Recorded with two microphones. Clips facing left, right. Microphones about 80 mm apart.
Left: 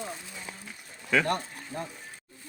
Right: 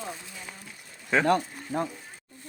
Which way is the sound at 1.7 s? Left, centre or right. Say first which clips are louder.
Right 7 dB; right.